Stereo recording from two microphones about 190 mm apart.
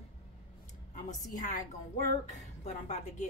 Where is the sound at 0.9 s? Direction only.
45° left (ahead or behind).